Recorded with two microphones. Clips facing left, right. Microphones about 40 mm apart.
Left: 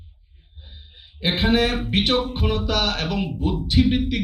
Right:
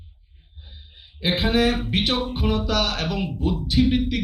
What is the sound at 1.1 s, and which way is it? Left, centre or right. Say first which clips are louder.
A man's voice: left 1 dB; left.